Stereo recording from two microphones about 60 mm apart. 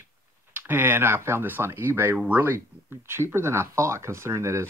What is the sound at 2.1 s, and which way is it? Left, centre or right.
Speech, right.